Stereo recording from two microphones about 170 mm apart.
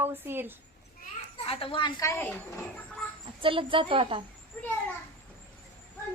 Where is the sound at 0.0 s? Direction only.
15° right (ahead or behind).